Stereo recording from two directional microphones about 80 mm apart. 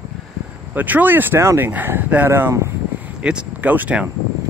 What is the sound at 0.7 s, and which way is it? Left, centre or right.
Speech, right.